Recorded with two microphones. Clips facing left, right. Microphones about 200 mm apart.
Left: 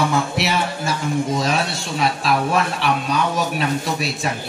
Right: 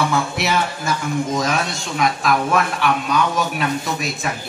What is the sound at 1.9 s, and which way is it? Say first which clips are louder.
Speech: right 1 dB; 30° left (ahead or behind).